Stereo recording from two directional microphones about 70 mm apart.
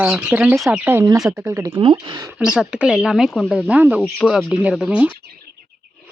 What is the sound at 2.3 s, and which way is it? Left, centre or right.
Speech, centre.